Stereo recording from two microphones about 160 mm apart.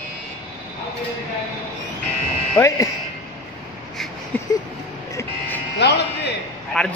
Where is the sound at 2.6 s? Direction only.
15° left (ahead or behind).